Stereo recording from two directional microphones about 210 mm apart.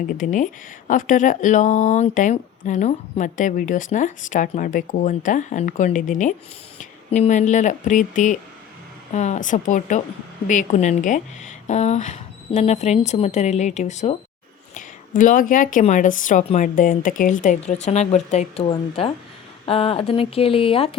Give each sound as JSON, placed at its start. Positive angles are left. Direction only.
{"t": 0.2, "sound": "a woman's voice", "side_deg": 40}